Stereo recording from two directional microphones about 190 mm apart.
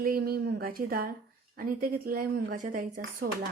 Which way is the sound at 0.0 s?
50° right (ahead or behind).